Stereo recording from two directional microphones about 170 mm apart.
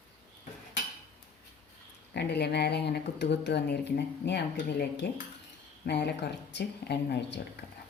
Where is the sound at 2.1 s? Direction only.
75° left (ahead or behind).